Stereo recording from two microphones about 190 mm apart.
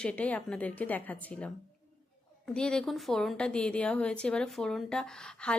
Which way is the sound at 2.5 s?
5° left (ahead or behind).